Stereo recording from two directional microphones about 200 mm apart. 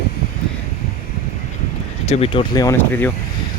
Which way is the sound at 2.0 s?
30° left (ahead or behind).